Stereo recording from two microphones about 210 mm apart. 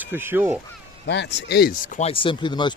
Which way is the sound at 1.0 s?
55° left (ahead or behind).